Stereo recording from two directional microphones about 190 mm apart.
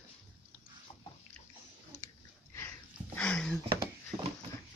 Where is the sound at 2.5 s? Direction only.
10° left (ahead or behind).